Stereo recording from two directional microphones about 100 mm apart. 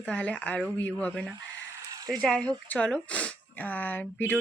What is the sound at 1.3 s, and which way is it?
Bleat, 40° right (ahead or behind).